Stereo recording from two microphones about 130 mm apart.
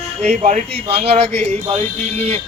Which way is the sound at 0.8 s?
50° right (ahead or behind).